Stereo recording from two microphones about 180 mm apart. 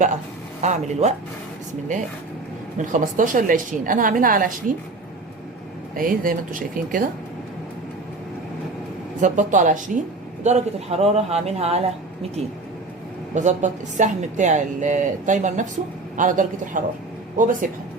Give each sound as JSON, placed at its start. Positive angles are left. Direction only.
{"t": 0.6, "sound": "a woman's voice", "side_deg": -40}
{"t": 6.0, "sound": "a woman's voice", "side_deg": -50}
{"t": 9.2, "sound": "a woman's voice", "side_deg": -45}
{"t": 13.3, "sound": "a woman's voice", "side_deg": -40}